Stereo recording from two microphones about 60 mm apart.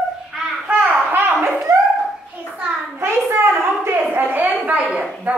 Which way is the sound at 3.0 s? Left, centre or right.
Right.